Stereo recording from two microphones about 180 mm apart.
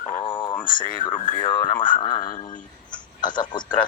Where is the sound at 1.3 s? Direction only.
25° left (ahead or behind).